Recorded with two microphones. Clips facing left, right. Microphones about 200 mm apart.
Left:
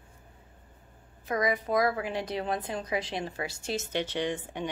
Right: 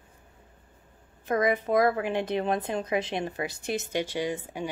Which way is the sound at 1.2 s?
50° right (ahead or behind).